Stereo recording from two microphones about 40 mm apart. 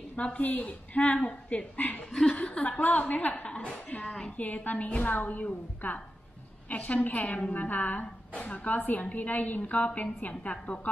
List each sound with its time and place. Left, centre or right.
0.1 s a woman's voice: left
2.0 s speech: centre
2.3 s speech: left
2.8 s a woman's voice: left
5.1 s a woman's voice: left
7.2 s a woman's voice: left
7.5 s a woman's voice: left